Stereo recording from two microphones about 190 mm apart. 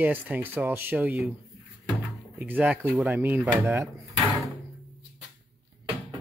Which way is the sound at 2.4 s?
10° right (ahead or behind).